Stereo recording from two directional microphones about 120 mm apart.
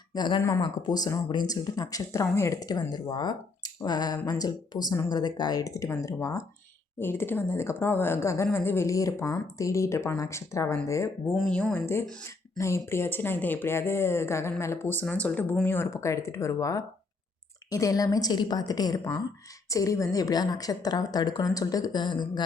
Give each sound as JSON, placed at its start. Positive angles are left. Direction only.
{"t": 0.1, "sound": "a woman's voice", "side_deg": 40}
{"t": 11.3, "sound": "speech", "side_deg": 5}
{"t": 12.5, "sound": "a woman's voice", "side_deg": 25}